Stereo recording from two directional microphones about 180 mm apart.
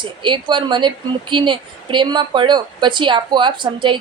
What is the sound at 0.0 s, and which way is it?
Speech, 25° right (ahead or behind).